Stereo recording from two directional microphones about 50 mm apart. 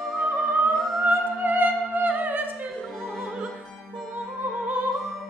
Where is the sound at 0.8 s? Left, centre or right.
Centre.